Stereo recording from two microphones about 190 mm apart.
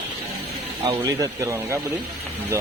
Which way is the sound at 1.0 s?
15° right (ahead or behind).